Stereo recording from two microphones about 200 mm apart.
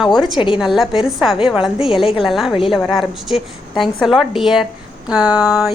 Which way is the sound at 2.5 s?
25° left (ahead or behind).